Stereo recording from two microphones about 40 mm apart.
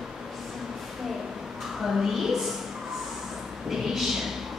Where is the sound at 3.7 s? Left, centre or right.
Centre.